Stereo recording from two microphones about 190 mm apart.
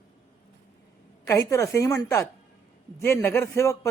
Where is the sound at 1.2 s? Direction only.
15° left (ahead or behind).